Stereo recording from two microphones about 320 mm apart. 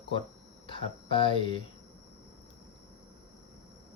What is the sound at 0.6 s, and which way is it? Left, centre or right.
Speech, centre.